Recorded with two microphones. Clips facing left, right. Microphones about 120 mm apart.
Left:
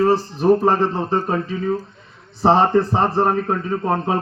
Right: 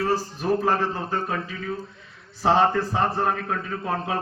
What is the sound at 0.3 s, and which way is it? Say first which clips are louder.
A man's voice: left 7 dB; 35° left (ahead or behind).